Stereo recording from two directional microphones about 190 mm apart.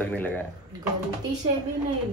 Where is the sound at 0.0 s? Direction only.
10° left (ahead or behind).